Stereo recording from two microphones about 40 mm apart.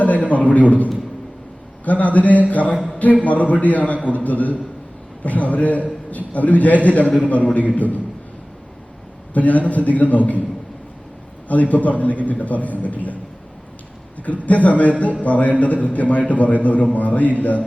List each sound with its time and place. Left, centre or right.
0.0 s a sound: left
1.8 s a man's voice: left
9.3 s a man's voice: left
11.4 s a man's voice: left
14.4 s a man's voice: left